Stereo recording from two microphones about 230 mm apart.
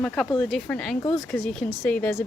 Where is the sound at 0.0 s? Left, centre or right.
Centre.